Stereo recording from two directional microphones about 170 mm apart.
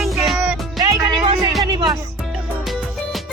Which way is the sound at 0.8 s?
25° right (ahead or behind).